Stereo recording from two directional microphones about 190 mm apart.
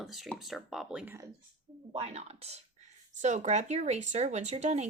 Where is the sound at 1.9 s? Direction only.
30° right (ahead or behind).